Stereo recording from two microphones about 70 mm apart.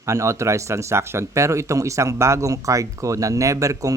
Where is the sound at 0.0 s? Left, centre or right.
Right.